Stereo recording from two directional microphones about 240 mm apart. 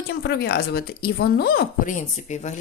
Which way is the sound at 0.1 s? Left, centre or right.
Left.